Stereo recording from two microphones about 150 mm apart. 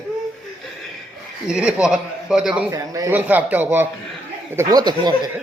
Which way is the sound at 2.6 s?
20° right (ahead or behind).